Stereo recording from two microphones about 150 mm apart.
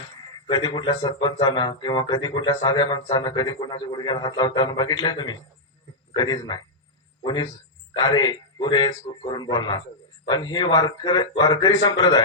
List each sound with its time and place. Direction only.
0.4 s speech: 30° left (ahead or behind)